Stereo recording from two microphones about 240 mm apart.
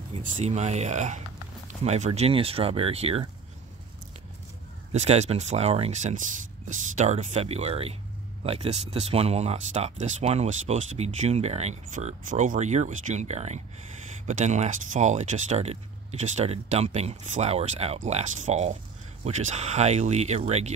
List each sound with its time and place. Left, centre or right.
0.1 s speech: right
4.9 s speech: right